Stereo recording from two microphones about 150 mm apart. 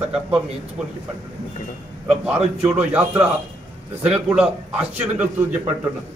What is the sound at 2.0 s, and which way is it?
A man's voice, 10° right (ahead or behind).